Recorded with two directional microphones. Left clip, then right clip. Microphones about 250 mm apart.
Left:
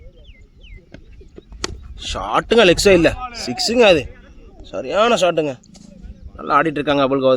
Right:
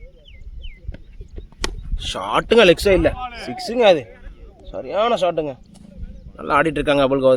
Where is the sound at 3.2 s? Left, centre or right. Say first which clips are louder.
Left 1 dB; right.